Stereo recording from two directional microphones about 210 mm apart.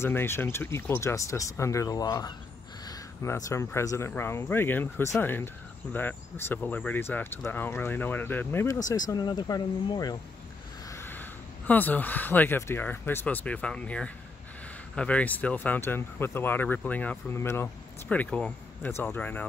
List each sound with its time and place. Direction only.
0.0 s speech: 10° left (ahead or behind)